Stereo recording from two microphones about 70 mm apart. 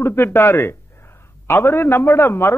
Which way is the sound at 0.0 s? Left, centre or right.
Left.